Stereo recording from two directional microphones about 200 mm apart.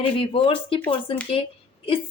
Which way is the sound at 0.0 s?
25° left (ahead or behind).